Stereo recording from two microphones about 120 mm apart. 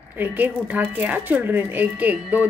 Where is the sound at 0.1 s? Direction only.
15° right (ahead or behind).